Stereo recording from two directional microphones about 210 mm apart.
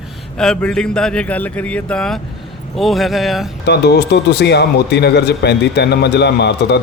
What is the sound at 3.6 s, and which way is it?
A man's voice, 50° left (ahead or behind).